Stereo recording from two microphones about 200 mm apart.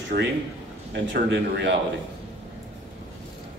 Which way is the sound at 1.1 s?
55° right (ahead or behind).